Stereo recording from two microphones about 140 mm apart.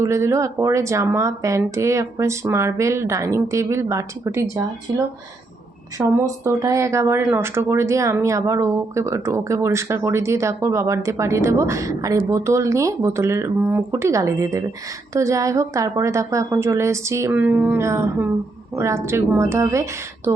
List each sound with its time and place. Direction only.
0.0 s speech: 20° right (ahead or behind)
6.1 s speech: 20° right (ahead or behind)
17.3 s speech: 10° right (ahead or behind)